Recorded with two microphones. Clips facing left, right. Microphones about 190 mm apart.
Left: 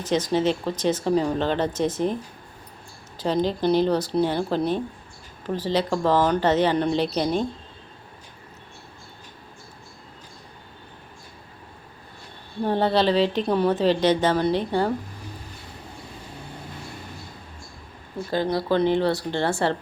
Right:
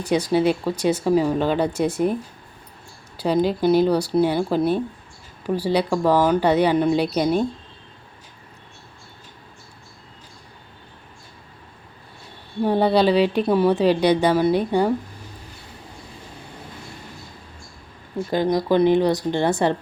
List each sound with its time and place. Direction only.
0.0 s speech: 10° right (ahead or behind)
3.2 s speech: 10° right (ahead or behind)
12.6 s speech: 10° right (ahead or behind)
18.3 s speech: 15° right (ahead or behind)